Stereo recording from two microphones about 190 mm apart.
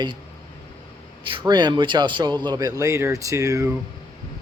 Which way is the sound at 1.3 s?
25° right (ahead or behind).